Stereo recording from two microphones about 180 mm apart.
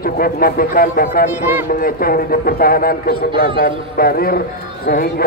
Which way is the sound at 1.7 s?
55° left (ahead or behind).